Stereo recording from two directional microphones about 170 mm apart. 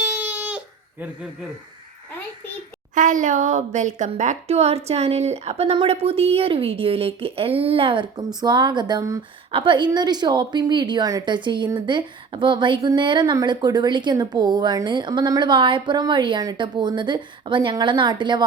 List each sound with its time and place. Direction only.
0.0 s crying: 10° right (ahead or behind)
2.9 s a woman's voice: 50° right (ahead or behind); by 9.2 s 20° right (ahead or behind)
9.5 s a woman's voice: 30° right (ahead or behind)